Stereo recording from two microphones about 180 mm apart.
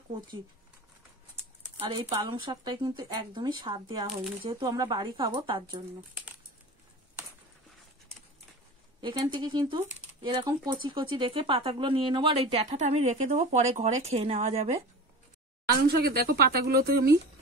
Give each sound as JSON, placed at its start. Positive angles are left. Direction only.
{"t": 1.8, "sound": "speech", "side_deg": -25}
{"t": 9.0, "sound": "speech", "side_deg": -25}
{"t": 16.0, "sound": "speech", "side_deg": -60}